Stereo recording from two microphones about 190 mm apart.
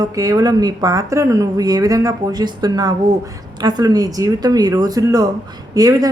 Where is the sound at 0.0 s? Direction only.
20° right (ahead or behind).